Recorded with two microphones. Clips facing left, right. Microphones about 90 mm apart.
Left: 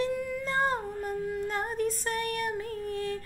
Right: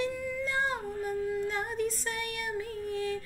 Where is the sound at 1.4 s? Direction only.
45° left (ahead or behind).